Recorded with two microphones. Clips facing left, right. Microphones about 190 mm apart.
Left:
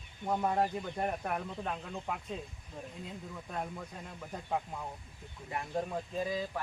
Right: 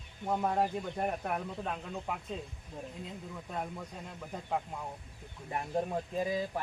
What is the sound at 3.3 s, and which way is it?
Speech, 5° right (ahead or behind).